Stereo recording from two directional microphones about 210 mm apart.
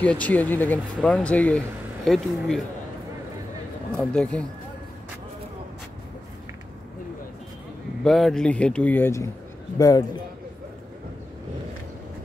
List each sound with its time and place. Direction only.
0.0 s speech: 5° left (ahead or behind)
3.9 s speech: 5° left (ahead or behind)
8.0 s speech: centre (ahead or behind)